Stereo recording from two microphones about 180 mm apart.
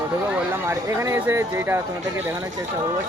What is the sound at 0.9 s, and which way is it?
Speech, 15° right (ahead or behind).